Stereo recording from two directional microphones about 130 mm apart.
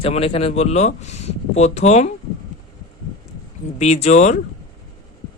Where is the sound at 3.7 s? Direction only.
60° left (ahead or behind).